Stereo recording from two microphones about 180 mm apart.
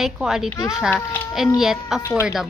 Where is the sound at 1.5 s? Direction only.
Centre (ahead or behind).